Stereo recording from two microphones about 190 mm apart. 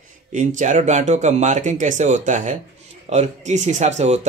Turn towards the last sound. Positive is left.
turn(degrees=-35)  # may be behind; listen again after turning